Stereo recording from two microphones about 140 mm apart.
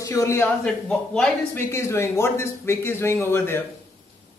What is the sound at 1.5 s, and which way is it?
Speech, 20° left (ahead or behind).